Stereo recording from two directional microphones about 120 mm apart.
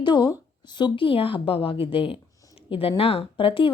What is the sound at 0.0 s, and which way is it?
A woman's voice, 40° left (ahead or behind).